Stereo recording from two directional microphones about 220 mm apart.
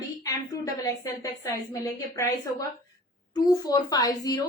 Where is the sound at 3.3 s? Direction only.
15° left (ahead or behind).